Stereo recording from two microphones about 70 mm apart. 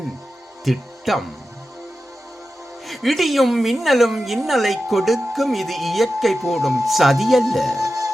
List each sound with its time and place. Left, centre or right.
0.6 s speech: centre
2.8 s a woman's voice: centre
7.8 s music: right